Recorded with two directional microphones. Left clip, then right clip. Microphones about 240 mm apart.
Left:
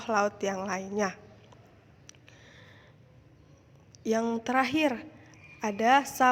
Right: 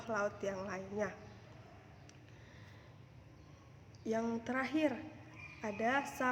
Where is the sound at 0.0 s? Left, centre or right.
Left.